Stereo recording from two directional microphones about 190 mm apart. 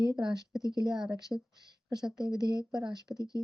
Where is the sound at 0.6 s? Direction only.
20° left (ahead or behind).